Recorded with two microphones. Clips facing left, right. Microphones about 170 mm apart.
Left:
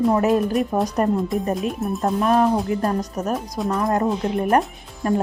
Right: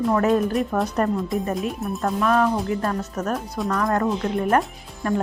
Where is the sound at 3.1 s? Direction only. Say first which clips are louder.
Left 1 dB; 5° left (ahead or behind).